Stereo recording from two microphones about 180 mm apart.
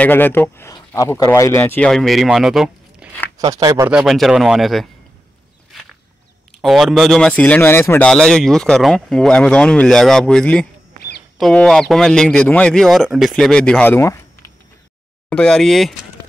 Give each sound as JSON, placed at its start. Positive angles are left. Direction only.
{"t": 0.0, "sound": "speech", "side_deg": 10}
{"t": 3.3, "sound": "speech", "side_deg": -20}
{"t": 3.9, "sound": "speech", "side_deg": 0}
{"t": 6.6, "sound": "speech", "side_deg": 0}
{"t": 15.2, "sound": "speech", "side_deg": 5}